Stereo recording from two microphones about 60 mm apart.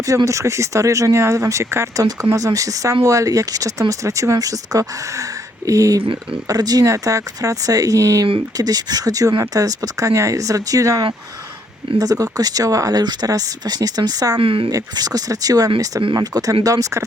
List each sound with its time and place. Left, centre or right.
0.0 s speech: right
2.3 s speech: right
6.5 s speech: right
11.9 s speech: right